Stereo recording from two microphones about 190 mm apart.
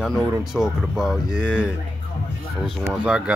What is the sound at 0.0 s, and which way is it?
Speech, centre (ahead or behind).